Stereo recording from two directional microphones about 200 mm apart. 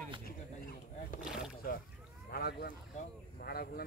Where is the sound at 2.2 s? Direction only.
50° left (ahead or behind).